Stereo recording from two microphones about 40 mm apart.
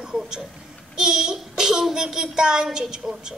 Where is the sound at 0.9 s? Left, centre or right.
Centre.